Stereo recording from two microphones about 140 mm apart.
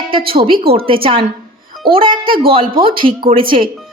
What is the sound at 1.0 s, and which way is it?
Speech, 40° right (ahead or behind).